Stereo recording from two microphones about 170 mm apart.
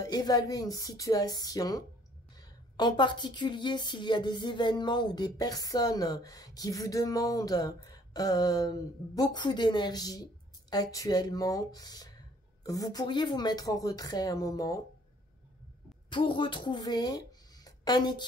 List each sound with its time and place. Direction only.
0.0 s a woman's voice: 25° left (ahead or behind)
16.1 s speech: 30° left (ahead or behind)